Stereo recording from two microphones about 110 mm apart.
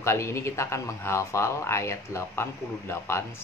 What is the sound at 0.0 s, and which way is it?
Speech, 25° left (ahead or behind).